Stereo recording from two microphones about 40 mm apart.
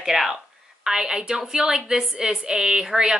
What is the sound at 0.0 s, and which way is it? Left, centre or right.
A woman's voice, centre.